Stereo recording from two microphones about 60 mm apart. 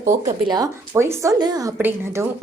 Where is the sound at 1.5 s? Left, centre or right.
Right.